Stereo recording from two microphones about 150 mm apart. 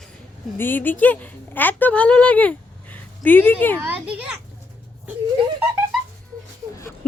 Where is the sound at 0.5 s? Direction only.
15° left (ahead or behind).